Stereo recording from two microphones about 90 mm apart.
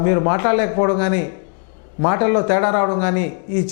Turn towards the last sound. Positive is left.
turn(degrees=15)  # may be behind; listen again after turning